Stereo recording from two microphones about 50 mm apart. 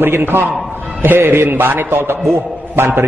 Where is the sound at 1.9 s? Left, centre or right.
Right.